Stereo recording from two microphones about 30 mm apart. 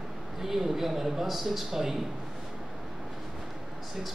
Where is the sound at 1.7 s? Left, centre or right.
Centre.